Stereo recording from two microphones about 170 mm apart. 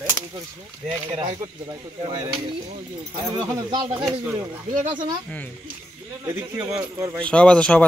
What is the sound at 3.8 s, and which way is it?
Speech, 10° right (ahead or behind).